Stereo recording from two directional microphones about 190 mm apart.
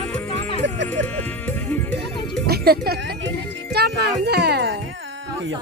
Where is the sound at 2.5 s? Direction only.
55° right (ahead or behind).